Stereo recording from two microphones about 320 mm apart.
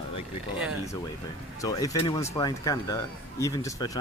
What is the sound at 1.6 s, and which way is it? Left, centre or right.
Speech, centre.